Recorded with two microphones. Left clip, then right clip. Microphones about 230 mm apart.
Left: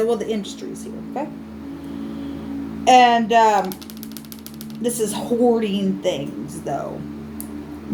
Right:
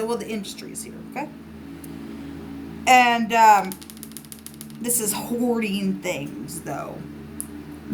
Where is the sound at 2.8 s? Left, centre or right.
Right.